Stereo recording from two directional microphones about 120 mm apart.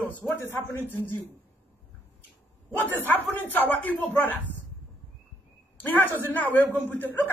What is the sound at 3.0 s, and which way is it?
A man's voice, 15° left (ahead or behind).